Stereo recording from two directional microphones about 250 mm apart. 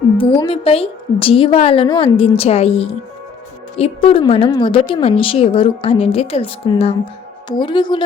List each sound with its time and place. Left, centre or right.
0.2 s a woman's voice: left